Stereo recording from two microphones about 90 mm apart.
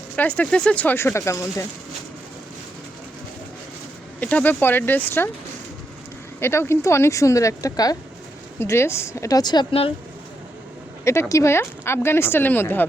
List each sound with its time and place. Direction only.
0.2 s speech: 15° left (ahead or behind)
0.9 s speech: 30° left (ahead or behind)
4.2 s speech: 15° left (ahead or behind)
6.4 s speech: 30° left (ahead or behind)
8.5 s speech: 30° left (ahead or behind)
9.4 s speech: 50° left (ahead or behind)
11.0 s speech: 30° left (ahead or behind)